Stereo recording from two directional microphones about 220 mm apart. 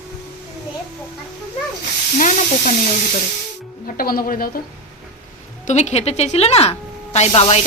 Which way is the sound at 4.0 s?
40° left (ahead or behind).